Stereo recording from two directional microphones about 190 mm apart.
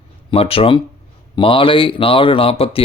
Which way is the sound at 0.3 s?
30° left (ahead or behind).